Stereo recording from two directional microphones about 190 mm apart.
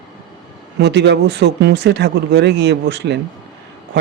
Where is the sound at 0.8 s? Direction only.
65° right (ahead or behind).